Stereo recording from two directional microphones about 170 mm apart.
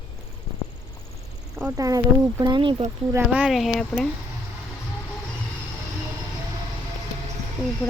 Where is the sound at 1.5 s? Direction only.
15° right (ahead or behind).